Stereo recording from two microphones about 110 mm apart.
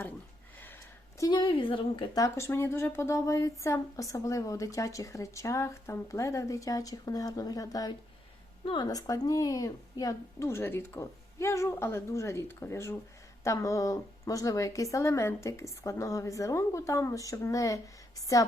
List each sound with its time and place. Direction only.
1.2 s a woman's voice: 45° left (ahead or behind)
2.1 s a woman's voice: 25° left (ahead or behind)